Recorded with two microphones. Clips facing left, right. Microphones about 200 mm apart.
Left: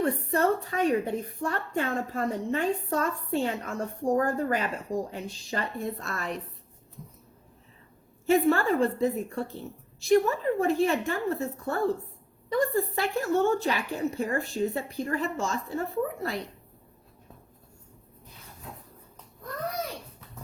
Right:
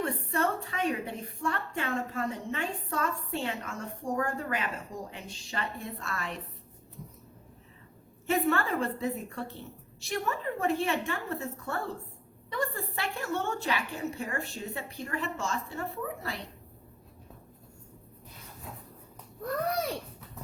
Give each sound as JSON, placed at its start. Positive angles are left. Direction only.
{"t": 0.0, "sound": "a woman's voice", "side_deg": 35}
{"t": 8.3, "sound": "a woman's voice", "side_deg": 35}